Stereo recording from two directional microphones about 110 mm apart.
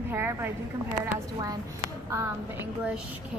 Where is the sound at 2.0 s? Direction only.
25° right (ahead or behind).